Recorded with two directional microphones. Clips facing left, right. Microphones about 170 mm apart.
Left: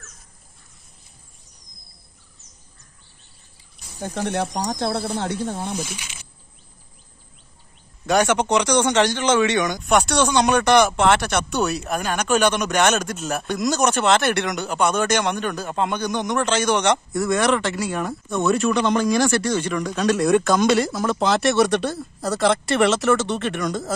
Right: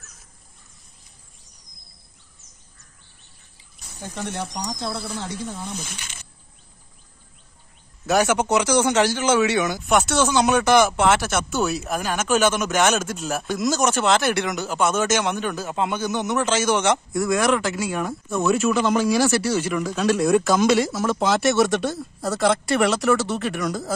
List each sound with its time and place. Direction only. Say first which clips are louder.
4.0 s speech: left 6 dB; 60° left (ahead or behind)
5.8 s speech: left 6 dB; 10° left (ahead or behind)
8.1 s speech: left 1 dB; 5° right (ahead or behind)